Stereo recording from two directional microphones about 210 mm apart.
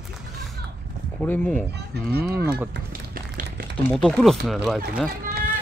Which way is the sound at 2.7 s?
45° right (ahead or behind).